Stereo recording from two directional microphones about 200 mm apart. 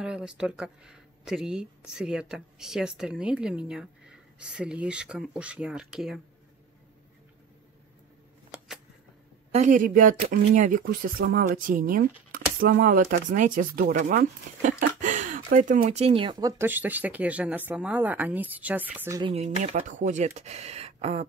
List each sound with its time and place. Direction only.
0.0 s speech: 5° right (ahead or behind)
9.5 s speech: 35° right (ahead or behind); by 19.3 s 15° right (ahead or behind)
19.3 s speech: 35° right (ahead or behind)